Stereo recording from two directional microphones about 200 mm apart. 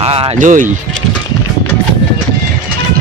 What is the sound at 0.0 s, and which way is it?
Music, 30° right (ahead or behind).